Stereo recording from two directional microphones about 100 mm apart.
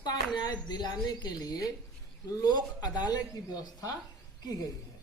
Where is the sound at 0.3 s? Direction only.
45° left (ahead or behind).